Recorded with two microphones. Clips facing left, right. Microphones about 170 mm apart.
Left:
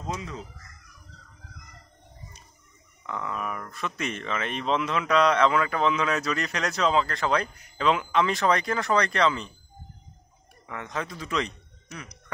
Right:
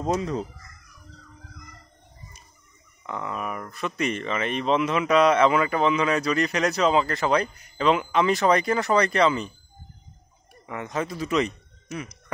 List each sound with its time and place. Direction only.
0.0 s speech: 40° right (ahead or behind)
3.1 s speech: 5° right (ahead or behind)
10.7 s speech: 5° right (ahead or behind)